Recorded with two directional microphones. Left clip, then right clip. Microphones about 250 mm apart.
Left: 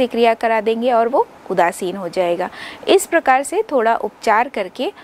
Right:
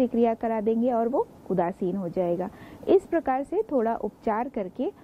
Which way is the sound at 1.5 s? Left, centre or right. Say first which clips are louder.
Left 11 dB; centre.